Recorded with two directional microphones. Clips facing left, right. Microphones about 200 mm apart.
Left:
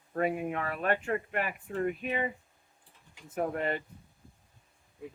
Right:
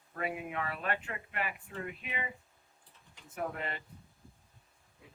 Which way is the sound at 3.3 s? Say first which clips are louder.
Left 7 dB; 45° left (ahead or behind).